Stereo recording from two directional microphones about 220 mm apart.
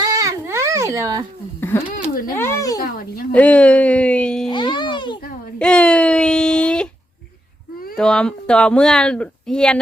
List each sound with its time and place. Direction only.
0.0 s baby cry: 15° right (ahead or behind)
1.6 s speech: 10° left (ahead or behind)
2.8 s speech: 45° left (ahead or behind)
3.3 s speech: 5° left (ahead or behind)
4.4 s music: 20° left (ahead or behind)
5.5 s a sound: 5° left (ahead or behind)
7.9 s speech: 5° left (ahead or behind)